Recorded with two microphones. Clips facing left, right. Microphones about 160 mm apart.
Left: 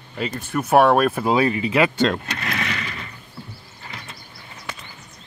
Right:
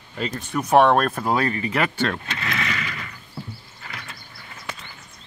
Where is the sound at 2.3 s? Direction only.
35° left (ahead or behind).